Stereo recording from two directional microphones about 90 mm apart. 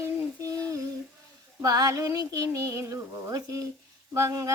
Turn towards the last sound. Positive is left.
turn(degrees=-40)  # may be behind; listen again after turning